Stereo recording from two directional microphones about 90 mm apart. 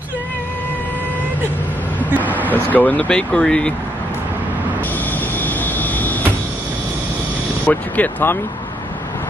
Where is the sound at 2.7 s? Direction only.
20° left (ahead or behind).